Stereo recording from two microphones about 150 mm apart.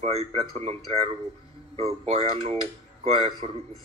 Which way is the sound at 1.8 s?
40° right (ahead or behind).